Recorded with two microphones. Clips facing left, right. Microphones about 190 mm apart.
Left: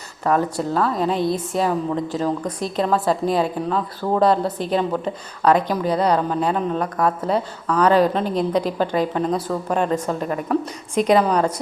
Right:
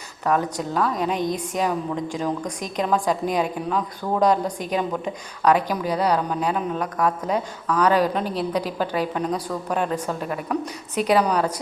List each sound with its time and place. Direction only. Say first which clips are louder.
0.7 s a woman's voice: left 2 dB; 10° right (ahead or behind)